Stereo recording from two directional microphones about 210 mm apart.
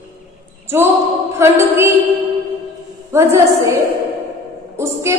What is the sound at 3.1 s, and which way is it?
Speech, 15° right (ahead or behind).